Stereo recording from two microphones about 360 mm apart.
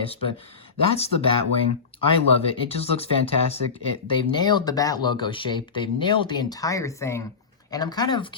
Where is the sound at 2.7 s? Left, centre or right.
Centre.